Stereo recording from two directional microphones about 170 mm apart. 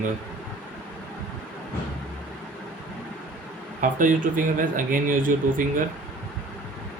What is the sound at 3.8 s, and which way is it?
Speech, 50° right (ahead or behind).